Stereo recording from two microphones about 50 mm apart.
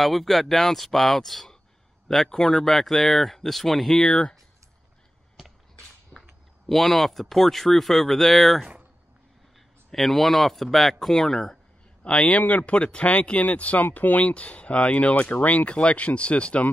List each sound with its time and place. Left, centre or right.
0.0 s speech: centre
5.4 s a sound: centre
6.1 s a sound: right
6.7 s speech: centre
9.8 s speech: centre
12.0 s speech: left